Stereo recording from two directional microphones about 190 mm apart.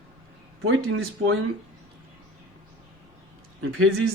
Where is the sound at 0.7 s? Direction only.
90° right.